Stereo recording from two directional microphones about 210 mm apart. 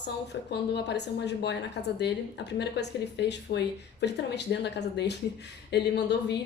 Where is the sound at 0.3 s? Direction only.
60° left (ahead or behind).